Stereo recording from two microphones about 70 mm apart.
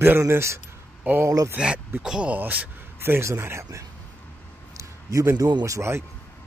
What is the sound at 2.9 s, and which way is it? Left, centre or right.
Speech, right.